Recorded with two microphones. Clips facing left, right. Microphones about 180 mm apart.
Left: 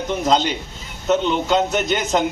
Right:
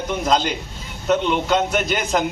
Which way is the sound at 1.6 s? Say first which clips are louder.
Left 1 dB; 20° left (ahead or behind).